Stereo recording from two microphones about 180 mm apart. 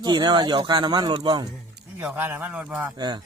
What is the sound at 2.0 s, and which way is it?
Speech, 10° right (ahead or behind).